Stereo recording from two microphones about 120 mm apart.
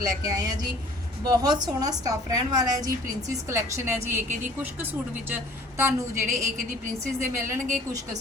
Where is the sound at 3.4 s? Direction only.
20° right (ahead or behind).